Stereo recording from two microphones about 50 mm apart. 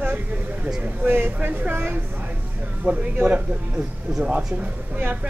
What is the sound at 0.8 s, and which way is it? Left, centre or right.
Speech, right.